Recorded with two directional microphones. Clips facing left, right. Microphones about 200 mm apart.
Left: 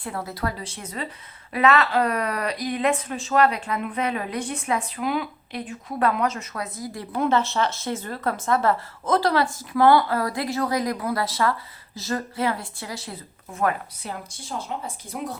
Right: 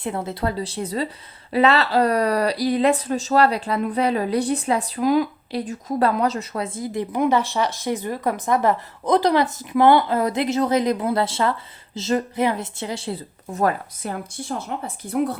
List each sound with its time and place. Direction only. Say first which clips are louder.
0.0 s speech: right 4 dB; 25° right (ahead or behind); by 15.4 s 60° right (ahead or behind)